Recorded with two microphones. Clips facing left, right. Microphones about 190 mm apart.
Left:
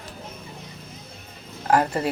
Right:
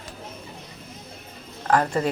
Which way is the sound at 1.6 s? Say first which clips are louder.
Even; 10° left (ahead or behind).